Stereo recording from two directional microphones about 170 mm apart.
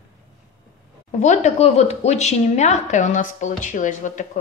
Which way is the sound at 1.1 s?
45° left (ahead or behind).